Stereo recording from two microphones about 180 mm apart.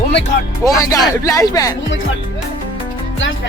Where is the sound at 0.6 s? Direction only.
20° left (ahead or behind).